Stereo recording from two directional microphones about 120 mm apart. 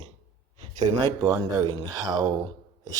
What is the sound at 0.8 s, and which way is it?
Speech, 40° right (ahead or behind).